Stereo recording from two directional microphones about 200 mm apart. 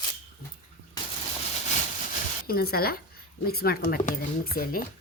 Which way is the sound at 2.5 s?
50° left (ahead or behind).